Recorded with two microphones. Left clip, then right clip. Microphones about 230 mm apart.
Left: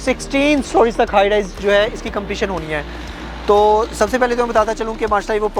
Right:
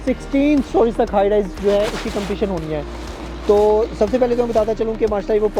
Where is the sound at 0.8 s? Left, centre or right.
Left.